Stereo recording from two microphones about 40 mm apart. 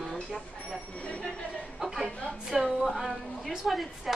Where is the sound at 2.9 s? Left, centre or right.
Centre.